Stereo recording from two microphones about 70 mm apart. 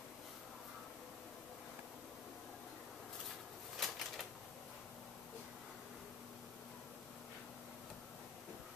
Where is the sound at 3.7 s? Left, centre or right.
Centre.